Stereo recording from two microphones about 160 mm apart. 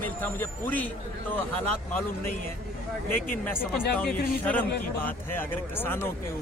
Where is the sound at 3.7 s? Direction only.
5° left (ahead or behind).